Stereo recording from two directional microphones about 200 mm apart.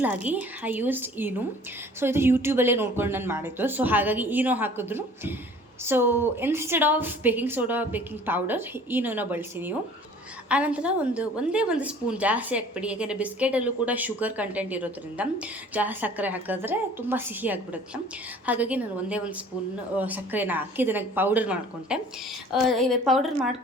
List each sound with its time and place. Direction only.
0.0 s a woman's voice: 10° right (ahead or behind)